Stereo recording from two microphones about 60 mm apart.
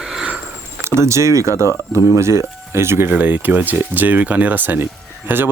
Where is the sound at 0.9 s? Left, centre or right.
Right.